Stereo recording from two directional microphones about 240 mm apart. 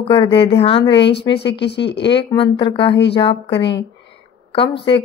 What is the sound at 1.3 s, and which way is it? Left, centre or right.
Speech, left.